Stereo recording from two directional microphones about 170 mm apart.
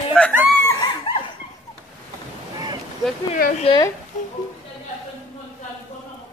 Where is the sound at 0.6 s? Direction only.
20° left (ahead or behind).